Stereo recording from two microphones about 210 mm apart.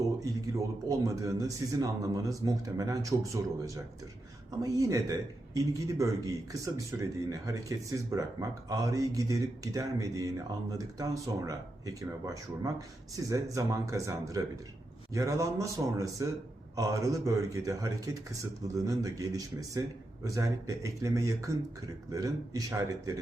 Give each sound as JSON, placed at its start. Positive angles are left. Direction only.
{"t": 0.9, "sound": "speech", "side_deg": -15}